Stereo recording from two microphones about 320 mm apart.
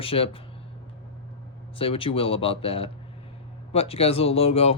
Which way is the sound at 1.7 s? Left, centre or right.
Centre.